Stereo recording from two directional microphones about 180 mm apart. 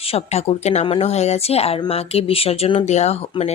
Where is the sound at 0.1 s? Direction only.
35° left (ahead or behind).